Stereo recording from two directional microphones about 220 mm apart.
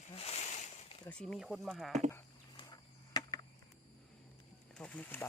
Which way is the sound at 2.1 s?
20° left (ahead or behind).